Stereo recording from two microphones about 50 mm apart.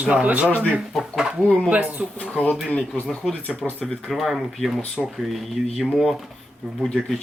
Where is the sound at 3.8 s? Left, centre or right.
Centre.